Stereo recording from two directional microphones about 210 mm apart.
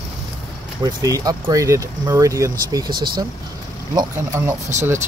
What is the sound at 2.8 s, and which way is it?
Speech, 45° right (ahead or behind).